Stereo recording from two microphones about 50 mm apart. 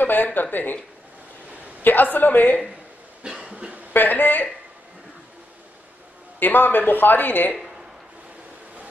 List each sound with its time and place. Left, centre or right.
0.0 s a woman's voice: left
1.8 s a woman's voice: left
3.4 s cough: right
3.9 s a woman's voice: left
6.4 s a woman's voice: left